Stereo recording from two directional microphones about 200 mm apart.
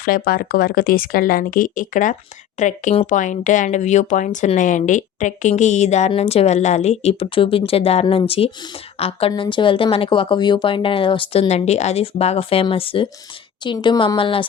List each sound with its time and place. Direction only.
0.0 s speech: 45° left (ahead or behind); by 14.4 s 25° left (ahead or behind)